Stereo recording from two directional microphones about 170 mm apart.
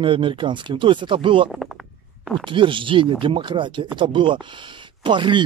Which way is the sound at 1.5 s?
Centre (ahead or behind).